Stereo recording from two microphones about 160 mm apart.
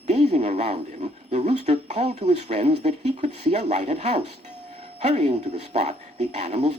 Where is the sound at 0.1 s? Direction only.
40° right (ahead or behind).